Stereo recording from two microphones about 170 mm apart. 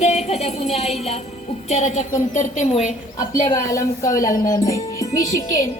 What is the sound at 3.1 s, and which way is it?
A woman's voice, 20° left (ahead or behind).